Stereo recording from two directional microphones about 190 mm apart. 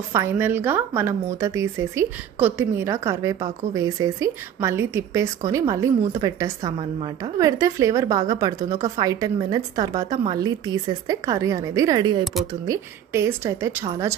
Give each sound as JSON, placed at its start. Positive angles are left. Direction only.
{"t": 0.1, "sound": "a woman's voice", "side_deg": -10}